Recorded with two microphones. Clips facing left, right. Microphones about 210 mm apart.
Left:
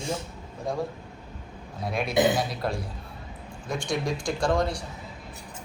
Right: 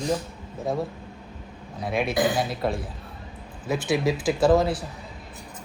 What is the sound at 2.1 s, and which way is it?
Speech, 20° left (ahead or behind).